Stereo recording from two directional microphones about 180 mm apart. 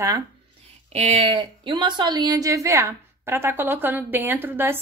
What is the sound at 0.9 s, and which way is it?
A woman's voice, 30° right (ahead or behind).